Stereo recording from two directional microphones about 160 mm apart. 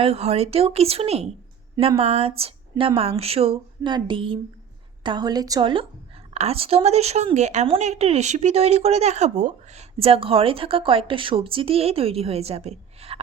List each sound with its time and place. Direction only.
0.0 s a woman's voice: 40° right (ahead or behind)